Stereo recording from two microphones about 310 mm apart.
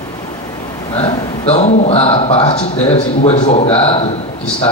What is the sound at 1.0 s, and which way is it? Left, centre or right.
A man's voice, centre.